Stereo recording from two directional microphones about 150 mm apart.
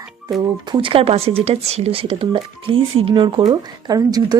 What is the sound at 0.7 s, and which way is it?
Speech, 35° right (ahead or behind).